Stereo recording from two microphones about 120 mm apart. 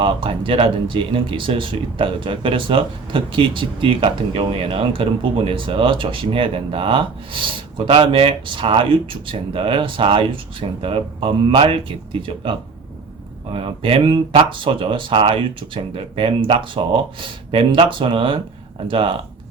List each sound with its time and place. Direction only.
0.0 s speech: 45° right (ahead or behind)
13.5 s speech: 50° right (ahead or behind)